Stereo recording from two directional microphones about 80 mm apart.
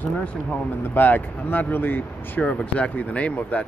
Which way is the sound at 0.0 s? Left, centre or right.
Centre.